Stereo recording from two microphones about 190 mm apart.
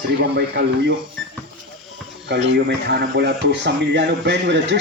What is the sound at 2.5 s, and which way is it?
Speech, 60° right (ahead or behind).